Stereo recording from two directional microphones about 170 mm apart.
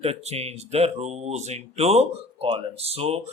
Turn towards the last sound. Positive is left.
turn(degrees=-35)  # may be behind; listen again after turning